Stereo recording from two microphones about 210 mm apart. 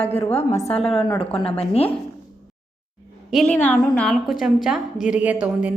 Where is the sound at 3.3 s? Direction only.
5° left (ahead or behind).